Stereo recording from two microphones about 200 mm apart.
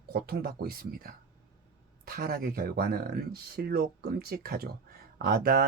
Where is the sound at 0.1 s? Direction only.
50° right (ahead or behind).